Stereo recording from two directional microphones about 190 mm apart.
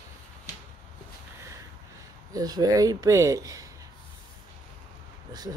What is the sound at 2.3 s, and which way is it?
Speech, 20° right (ahead or behind).